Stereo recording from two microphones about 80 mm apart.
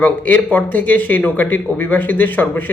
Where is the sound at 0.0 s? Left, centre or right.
Left.